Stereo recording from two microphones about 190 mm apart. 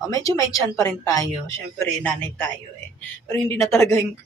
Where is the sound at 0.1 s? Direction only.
20° left (ahead or behind).